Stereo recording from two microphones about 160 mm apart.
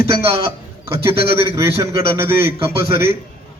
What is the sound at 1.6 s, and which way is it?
A man's voice, 20° right (ahead or behind).